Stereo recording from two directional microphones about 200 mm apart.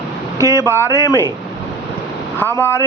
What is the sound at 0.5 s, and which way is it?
Speech, 10° left (ahead or behind).